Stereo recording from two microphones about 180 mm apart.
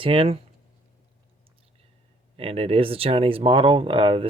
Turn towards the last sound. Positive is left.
turn(degrees=-30)  # may be behind; listen again after turning